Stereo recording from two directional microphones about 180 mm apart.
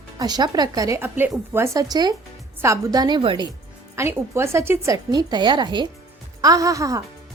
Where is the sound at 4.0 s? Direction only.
15° right (ahead or behind).